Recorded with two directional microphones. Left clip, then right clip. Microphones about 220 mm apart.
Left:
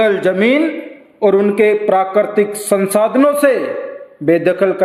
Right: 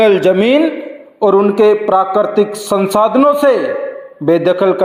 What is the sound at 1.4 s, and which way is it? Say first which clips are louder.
A man's voice: right 3 dB; centre (ahead or behind).